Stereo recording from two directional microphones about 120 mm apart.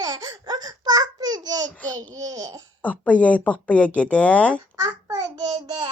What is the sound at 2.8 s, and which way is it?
Speech, 10° left (ahead or behind).